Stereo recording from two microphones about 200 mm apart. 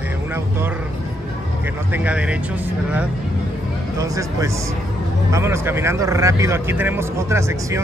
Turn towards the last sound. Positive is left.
turn(degrees=-15)  # may be behind; listen again after turning